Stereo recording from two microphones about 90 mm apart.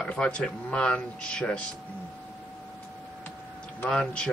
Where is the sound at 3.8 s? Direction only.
10° left (ahead or behind).